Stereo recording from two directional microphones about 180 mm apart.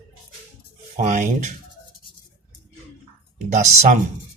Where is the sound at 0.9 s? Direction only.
40° right (ahead or behind).